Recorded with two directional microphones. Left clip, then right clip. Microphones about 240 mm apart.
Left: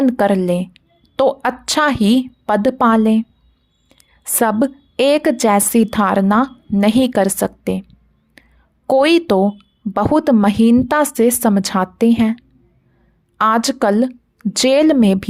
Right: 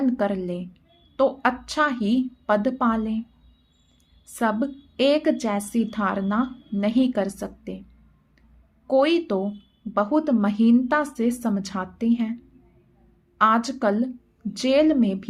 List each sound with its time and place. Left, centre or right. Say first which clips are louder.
0.0 s a woman's voice: left 10 dB; left
8.4 s whispering: left 18 dB; left
8.9 s a woman's voice: left 8 dB; left